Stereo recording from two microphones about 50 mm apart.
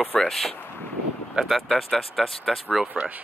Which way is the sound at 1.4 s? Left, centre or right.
Right.